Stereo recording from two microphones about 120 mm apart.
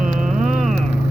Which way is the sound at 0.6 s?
Centre (ahead or behind).